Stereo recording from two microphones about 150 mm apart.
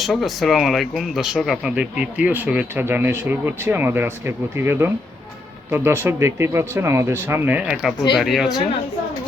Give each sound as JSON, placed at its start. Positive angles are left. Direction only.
{"t": 0.0, "sound": "speech", "side_deg": 0}